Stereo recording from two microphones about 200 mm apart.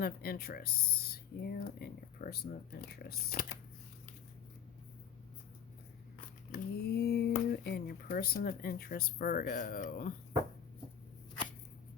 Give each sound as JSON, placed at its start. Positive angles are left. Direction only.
{"t": 0.0, "sound": "speech", "side_deg": 50}
{"t": 6.5, "sound": "speech", "side_deg": 50}